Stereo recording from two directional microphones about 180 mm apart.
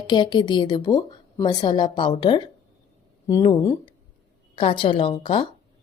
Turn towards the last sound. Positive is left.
turn(degrees=30)  # may be behind; listen again after turning